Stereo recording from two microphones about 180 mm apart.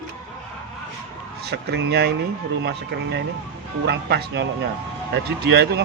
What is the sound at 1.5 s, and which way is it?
Speech, 70° right (ahead or behind).